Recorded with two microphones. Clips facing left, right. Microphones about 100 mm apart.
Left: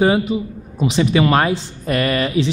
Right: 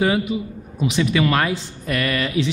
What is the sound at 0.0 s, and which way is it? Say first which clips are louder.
A man's voice: left 4 dB; 30° left (ahead or behind).